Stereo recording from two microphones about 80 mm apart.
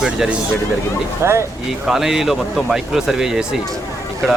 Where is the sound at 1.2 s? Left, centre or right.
Right.